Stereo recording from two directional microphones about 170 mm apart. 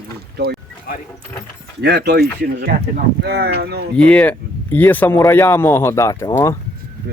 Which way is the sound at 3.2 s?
70° right (ahead or behind).